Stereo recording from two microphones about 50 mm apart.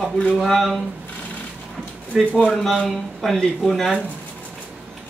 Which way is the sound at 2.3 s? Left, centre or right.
Left.